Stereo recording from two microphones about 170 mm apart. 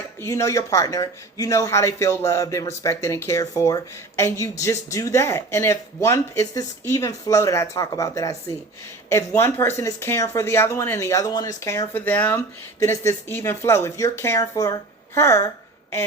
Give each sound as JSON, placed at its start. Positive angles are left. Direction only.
{"t": 0.3, "sound": "speech", "side_deg": 15}